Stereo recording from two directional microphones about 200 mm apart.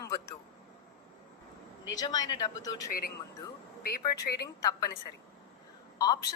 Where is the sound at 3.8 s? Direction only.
50° left (ahead or behind).